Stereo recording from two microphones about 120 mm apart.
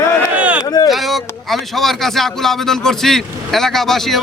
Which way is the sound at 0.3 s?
10° right (ahead or behind).